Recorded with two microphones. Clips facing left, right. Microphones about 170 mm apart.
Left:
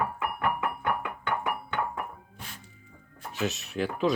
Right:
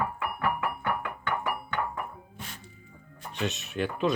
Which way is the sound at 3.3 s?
Centre (ahead or behind).